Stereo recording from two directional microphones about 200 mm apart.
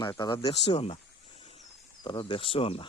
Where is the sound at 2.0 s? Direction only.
20° left (ahead or behind).